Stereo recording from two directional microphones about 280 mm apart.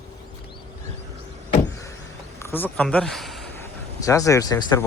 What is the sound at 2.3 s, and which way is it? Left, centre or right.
Speech, centre.